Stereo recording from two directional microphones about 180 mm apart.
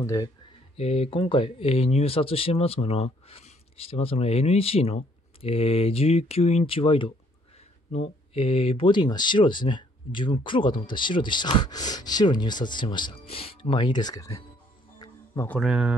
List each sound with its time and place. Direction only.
0.0 s speech: 20° left (ahead or behind)
0.7 s speech: 35° left (ahead or behind); by 14.4 s 20° left (ahead or behind)
15.0 s music: 15° left (ahead or behind)
15.6 s speech: 5° right (ahead or behind)